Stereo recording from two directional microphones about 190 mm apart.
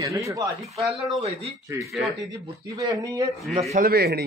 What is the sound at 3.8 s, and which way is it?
Speech, 55° right (ahead or behind).